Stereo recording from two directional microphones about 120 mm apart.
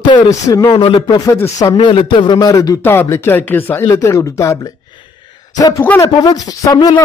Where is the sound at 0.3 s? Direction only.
25° left (ahead or behind).